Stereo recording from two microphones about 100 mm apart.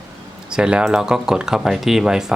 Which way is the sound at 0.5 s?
10° right (ahead or behind).